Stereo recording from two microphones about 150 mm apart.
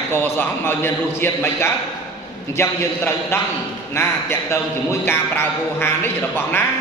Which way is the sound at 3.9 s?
15° left (ahead or behind).